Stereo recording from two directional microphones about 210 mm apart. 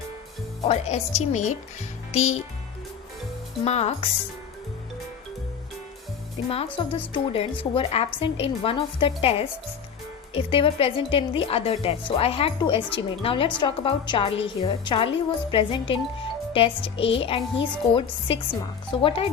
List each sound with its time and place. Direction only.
0.6 s speech: 30° left (ahead or behind)
3.6 s speech: 30° left (ahead or behind)
6.7 s a woman's voice: 25° left (ahead or behind)